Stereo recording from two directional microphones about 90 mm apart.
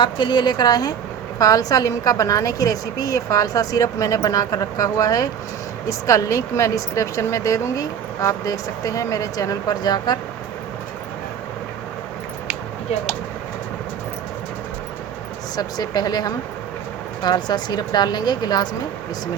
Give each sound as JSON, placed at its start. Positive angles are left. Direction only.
{"t": 0.0, "sound": "a woman's voice", "side_deg": 60}
{"t": 15.5, "sound": "a woman's voice", "side_deg": 45}